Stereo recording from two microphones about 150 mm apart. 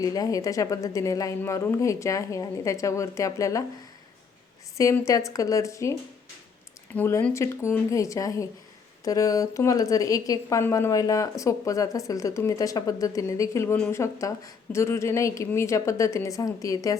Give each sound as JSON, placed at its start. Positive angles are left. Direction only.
{"t": 0.0, "sound": "a woman's voice", "side_deg": 25}
{"t": 4.8, "sound": "a woman's voice", "side_deg": 20}